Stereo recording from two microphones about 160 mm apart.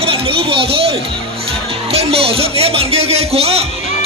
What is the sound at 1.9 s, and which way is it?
Music, 35° right (ahead or behind).